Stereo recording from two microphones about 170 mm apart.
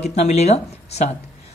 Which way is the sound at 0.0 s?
40° left (ahead or behind).